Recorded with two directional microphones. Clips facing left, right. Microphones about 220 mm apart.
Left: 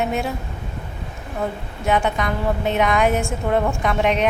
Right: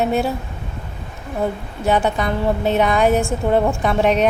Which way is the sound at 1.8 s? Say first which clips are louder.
Right 2 dB; 35° right (ahead or behind).